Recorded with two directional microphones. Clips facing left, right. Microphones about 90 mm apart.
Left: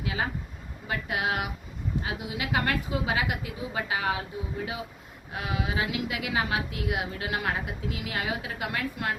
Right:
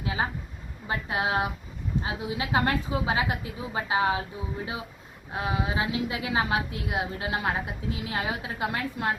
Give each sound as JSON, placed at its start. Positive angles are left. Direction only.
{"t": 0.0, "sound": "a woman's voice", "side_deg": -25}
{"t": 5.3, "sound": "a woman's voice", "side_deg": -30}